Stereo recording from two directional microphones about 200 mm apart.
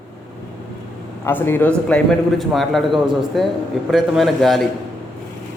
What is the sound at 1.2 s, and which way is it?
A man's voice, 10° left (ahead or behind).